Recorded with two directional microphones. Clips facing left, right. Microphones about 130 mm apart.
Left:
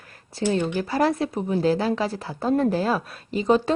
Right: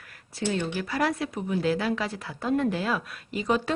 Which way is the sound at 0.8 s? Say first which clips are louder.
Left 5 dB; 30° left (ahead or behind).